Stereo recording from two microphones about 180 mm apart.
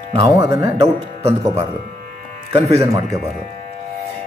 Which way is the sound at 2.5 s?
35° right (ahead or behind).